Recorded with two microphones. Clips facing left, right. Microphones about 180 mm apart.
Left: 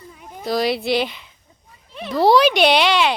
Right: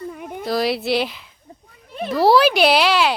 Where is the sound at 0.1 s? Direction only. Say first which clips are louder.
Right 8 dB; 65° right (ahead or behind).